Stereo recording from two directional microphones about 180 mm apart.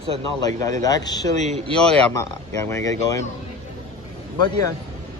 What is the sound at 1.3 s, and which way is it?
Speech, 40° right (ahead or behind).